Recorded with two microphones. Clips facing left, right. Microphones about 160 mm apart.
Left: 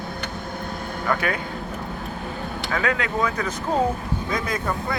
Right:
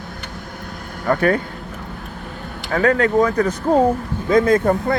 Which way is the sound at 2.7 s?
40° right (ahead or behind).